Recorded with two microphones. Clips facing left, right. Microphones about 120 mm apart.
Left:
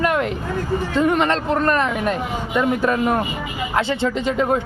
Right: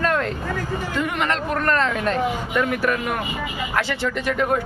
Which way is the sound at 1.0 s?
35° left (ahead or behind).